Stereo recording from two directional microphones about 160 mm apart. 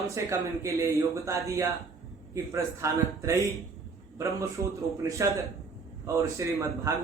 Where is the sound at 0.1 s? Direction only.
20° right (ahead or behind).